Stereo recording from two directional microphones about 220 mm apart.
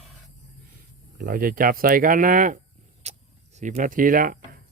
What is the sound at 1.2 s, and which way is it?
Speech, 40° right (ahead or behind).